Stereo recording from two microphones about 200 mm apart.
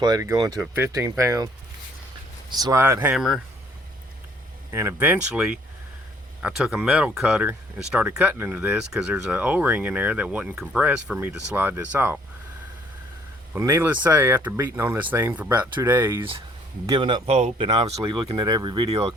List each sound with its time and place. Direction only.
0.0 s speech: 20° right (ahead or behind)
2.5 s speech: 20° right (ahead or behind); by 3.4 s centre (ahead or behind)
4.7 s speech: 10° right (ahead or behind)
13.5 s speech: 15° right (ahead or behind)